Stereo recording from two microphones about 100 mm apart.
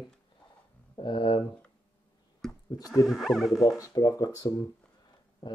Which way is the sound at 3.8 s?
40° left (ahead or behind).